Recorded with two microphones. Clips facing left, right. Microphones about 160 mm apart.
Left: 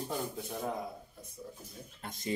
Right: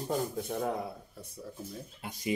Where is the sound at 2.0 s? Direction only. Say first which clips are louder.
Right 3 dB; 10° right (ahead or behind).